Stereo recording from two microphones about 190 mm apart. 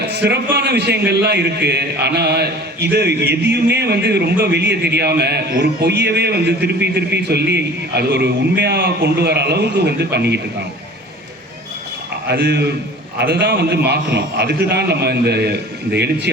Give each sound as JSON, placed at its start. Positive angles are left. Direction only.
{"t": 0.1, "sound": "a man's voice", "side_deg": -60}
{"t": 12.3, "sound": "a man's voice", "side_deg": -60}